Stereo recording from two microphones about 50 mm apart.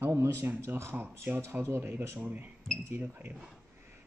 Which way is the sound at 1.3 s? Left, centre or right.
Right.